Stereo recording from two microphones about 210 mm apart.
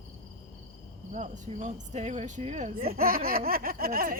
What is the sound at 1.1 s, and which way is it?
Speech, 35° right (ahead or behind).